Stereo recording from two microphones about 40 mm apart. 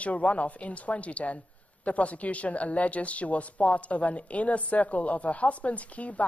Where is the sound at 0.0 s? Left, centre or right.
Left.